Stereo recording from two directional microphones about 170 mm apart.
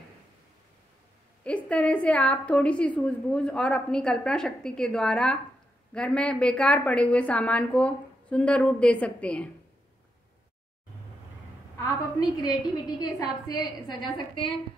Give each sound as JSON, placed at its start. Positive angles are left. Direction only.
{"t": 1.4, "sound": "a woman's voice", "side_deg": 5}
{"t": 11.8, "sound": "a woman's voice", "side_deg": 20}